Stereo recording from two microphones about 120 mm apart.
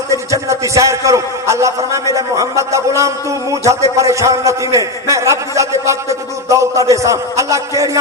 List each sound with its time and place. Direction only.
0.1 s a man's voice: 25° right (ahead or behind)